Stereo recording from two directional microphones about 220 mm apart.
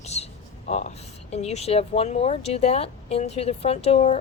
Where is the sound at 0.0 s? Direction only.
30° left (ahead or behind).